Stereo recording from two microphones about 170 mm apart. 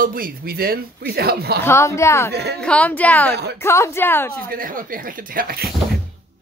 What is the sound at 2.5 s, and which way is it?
A woman's voice, 5° left (ahead or behind).